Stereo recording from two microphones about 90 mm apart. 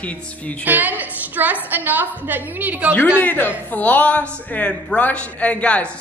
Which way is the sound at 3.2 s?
20° left (ahead or behind).